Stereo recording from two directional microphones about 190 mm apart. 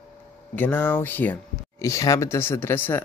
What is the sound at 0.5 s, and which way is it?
Speech, 10° left (ahead or behind).